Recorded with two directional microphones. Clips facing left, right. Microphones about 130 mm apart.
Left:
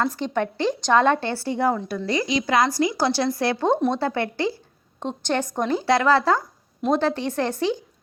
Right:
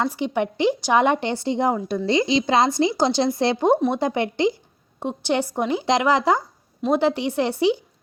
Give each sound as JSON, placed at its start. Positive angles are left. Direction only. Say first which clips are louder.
{"t": 0.0, "sound": "a woman's voice", "louder": "right 1 dB", "side_deg": -15}